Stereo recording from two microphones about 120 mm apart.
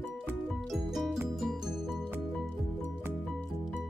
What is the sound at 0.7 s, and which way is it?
Music, centre (ahead or behind).